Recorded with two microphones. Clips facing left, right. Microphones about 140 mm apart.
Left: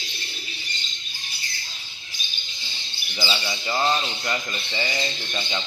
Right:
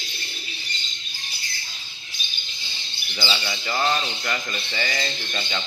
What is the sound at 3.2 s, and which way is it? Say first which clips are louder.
Speech: even; 10° left (ahead or behind).